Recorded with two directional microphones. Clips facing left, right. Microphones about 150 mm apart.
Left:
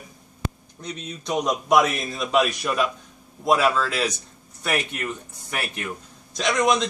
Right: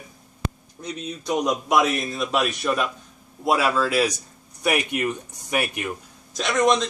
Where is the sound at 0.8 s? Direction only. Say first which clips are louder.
Right 2 dB; 10° right (ahead or behind).